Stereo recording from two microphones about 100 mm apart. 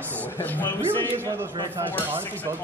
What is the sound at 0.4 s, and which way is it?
Speech, 20° left (ahead or behind).